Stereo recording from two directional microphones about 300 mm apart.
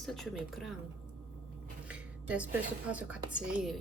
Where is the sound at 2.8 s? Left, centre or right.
Centre.